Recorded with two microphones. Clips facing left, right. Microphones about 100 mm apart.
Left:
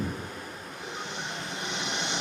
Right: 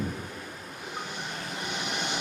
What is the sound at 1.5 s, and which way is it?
Vehicle, 30° left (ahead or behind).